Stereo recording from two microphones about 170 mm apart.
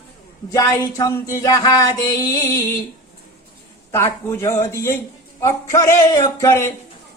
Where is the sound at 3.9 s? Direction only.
15° left (ahead or behind).